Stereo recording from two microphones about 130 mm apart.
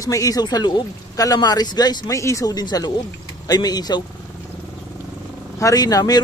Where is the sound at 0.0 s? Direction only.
25° left (ahead or behind).